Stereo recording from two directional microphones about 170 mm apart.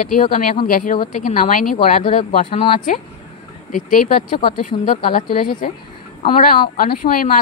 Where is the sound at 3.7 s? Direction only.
55° left (ahead or behind).